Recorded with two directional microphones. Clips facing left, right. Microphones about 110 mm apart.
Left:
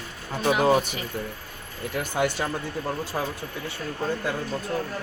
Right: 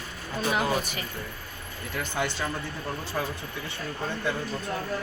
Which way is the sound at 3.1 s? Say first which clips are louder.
Even; 25° left (ahead or behind).